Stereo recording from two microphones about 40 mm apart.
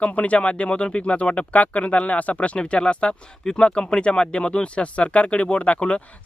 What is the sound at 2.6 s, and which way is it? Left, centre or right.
Speech, left.